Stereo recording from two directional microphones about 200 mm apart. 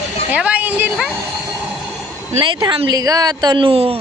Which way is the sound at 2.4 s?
20° right (ahead or behind).